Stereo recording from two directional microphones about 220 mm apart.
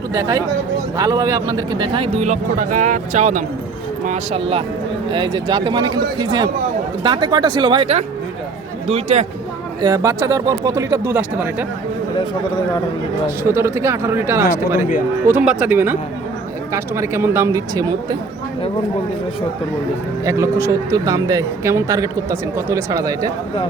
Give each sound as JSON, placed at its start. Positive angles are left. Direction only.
{"t": 0.1, "sound": "a man's voice", "side_deg": -15}
{"t": 9.8, "sound": "speech", "side_deg": -15}
{"t": 13.5, "sound": "speech", "side_deg": -10}
{"t": 14.8, "sound": "speech", "side_deg": 35}
{"t": 15.3, "sound": "speech", "side_deg": -5}
{"t": 20.2, "sound": "speech", "side_deg": -15}